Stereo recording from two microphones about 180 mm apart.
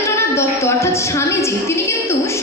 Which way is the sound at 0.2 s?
15° left (ahead or behind).